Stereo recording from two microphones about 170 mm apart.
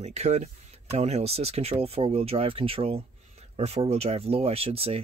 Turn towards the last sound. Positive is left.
turn(degrees=-35)  # may be behind; listen again after turning